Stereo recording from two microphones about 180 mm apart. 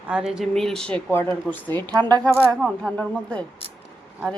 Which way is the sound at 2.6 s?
5° left (ahead or behind).